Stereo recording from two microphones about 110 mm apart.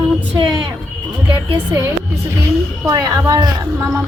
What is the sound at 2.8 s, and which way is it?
A woman's voice, 30° right (ahead or behind).